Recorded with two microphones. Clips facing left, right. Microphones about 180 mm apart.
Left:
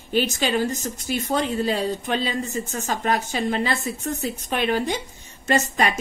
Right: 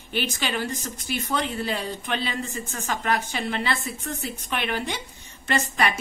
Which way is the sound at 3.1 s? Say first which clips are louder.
Left 4 dB; 40° left (ahead or behind).